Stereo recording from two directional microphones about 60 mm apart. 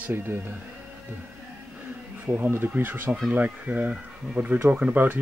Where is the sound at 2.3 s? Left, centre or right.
Right.